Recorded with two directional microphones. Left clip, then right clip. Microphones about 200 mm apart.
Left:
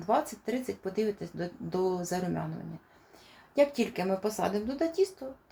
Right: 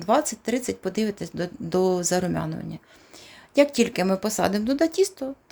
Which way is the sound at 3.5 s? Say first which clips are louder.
Right 7 dB; 60° right (ahead or behind).